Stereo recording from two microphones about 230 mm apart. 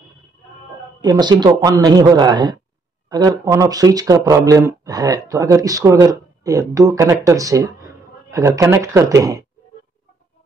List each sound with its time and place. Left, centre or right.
1.0 s speech: centre